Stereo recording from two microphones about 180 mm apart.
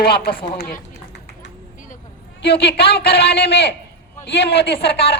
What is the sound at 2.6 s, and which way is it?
Music, 65° left (ahead or behind).